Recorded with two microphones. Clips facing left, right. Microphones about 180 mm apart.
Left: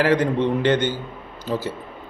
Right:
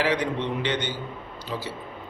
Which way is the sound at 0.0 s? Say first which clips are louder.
Left 6 dB; 50° left (ahead or behind).